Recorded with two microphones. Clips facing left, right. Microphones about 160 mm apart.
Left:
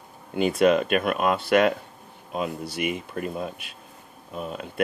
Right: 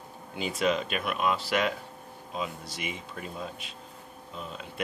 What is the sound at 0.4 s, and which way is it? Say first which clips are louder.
Speech: left 8 dB; 60° left (ahead or behind).